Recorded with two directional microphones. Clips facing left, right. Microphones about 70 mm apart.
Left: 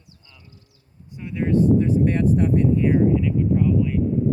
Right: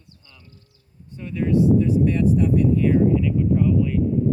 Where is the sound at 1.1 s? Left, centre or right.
Centre.